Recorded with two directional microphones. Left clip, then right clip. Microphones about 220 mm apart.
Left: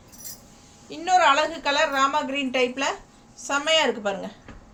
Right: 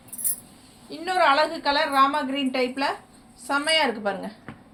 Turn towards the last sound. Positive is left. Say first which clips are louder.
# left 1 dB
turn(degrees=20)  # may be behind; listen again after turning